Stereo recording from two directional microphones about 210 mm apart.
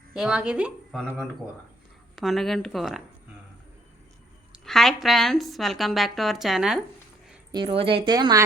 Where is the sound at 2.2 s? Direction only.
Centre (ahead or behind).